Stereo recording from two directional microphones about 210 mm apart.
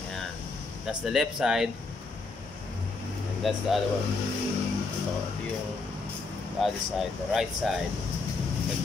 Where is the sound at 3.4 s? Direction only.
Centre (ahead or behind).